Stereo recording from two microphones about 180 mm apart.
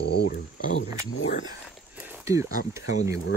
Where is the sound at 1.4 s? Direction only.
15° right (ahead or behind).